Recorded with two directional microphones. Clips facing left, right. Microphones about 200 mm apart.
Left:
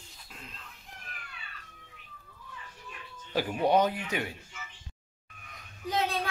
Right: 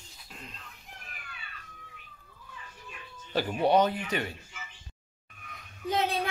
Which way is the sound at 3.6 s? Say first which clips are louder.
Right 1 dB; 10° left (ahead or behind).